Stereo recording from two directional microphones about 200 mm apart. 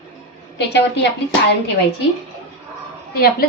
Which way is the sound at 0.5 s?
60° left (ahead or behind).